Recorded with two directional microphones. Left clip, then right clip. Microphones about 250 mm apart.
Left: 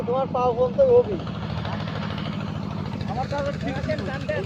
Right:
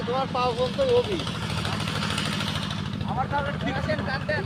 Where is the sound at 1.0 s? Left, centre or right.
Right.